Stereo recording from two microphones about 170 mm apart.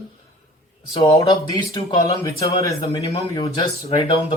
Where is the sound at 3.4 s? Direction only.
35° left (ahead or behind).